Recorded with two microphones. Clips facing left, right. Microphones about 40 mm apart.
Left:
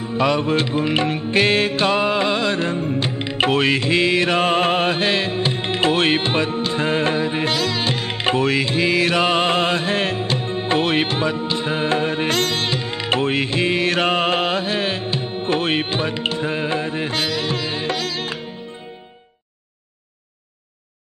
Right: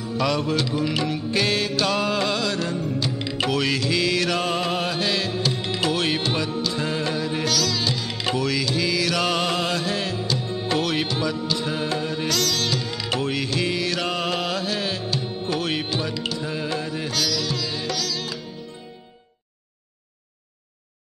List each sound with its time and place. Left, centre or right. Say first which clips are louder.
0.0 s music: left 4 dB; left